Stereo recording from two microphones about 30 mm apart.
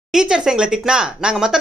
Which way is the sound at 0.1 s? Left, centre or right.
Right.